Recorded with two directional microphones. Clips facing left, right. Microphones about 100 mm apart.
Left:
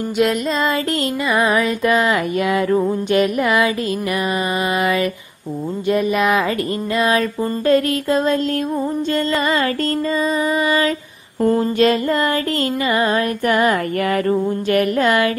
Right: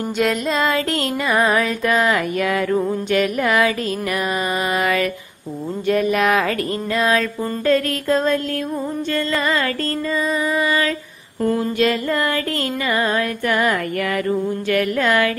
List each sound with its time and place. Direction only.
0.2 s music: centre (ahead or behind)
1.6 s female singing: 15° left (ahead or behind)
3.4 s a sound: 10° left (ahead or behind)
5.9 s music: 5° left (ahead or behind)
7.1 s female singing: 20° left (ahead or behind)
8.1 s a sound: 10° left (ahead or behind)
9.3 s female singing: 25° left (ahead or behind)
11.4 s a sound: 35° left (ahead or behind)
12.8 s female singing: 20° left (ahead or behind)